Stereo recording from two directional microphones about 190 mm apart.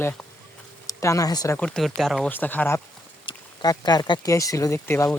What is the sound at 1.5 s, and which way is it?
Speech, 5° left (ahead or behind).